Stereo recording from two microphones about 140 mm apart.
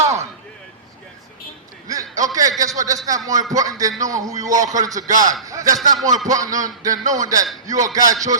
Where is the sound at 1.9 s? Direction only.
25° right (ahead or behind).